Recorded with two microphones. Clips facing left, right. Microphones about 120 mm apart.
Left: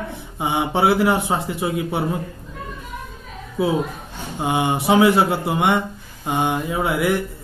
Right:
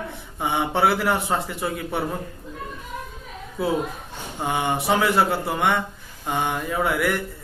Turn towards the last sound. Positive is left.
turn(degrees=20)  # may be behind; listen again after turning